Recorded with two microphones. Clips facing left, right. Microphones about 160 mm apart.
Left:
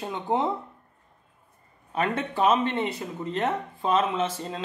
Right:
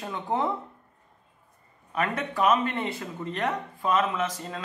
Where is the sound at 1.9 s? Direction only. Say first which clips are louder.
Left 2 dB; 25° left (ahead or behind).